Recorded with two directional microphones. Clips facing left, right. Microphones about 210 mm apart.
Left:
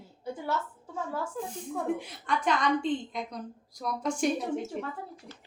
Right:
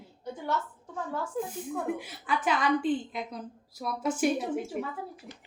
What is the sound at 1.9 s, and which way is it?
A woman's voice, 5° right (ahead or behind).